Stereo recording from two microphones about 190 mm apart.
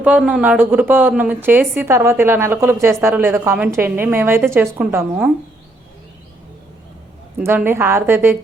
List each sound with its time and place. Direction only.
0.0 s a woman's voice: 5° right (ahead or behind)
7.3 s a woman's voice: 10° right (ahead or behind)